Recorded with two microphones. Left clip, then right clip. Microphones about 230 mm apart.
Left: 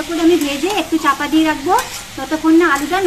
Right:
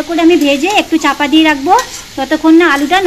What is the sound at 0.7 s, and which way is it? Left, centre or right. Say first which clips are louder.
A woman's voice: right 5 dB; right.